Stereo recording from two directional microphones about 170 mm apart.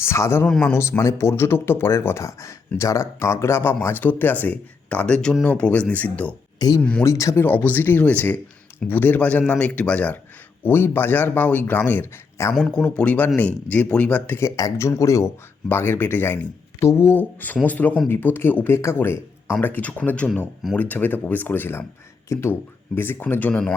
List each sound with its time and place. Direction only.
0.0 s speech: 15° left (ahead or behind)
0.4 s a man's voice: 5° left (ahead or behind)
0.7 s speech: 15° left (ahead or behind)
6.6 s speech: 25° left (ahead or behind)